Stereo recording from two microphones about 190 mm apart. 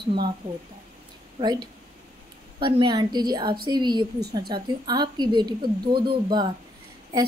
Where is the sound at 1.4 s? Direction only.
20° right (ahead or behind).